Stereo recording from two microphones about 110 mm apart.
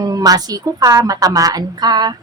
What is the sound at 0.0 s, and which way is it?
A woman's voice, 35° right (ahead or behind).